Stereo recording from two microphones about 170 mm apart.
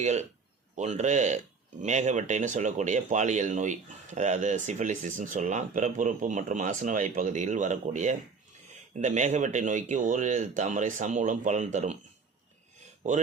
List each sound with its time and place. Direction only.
0.0 s speech: 40° right (ahead or behind)